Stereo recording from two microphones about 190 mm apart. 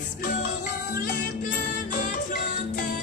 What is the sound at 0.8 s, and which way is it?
Music, 50° left (ahead or behind).